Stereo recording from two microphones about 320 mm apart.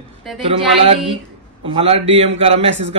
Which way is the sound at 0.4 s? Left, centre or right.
Centre.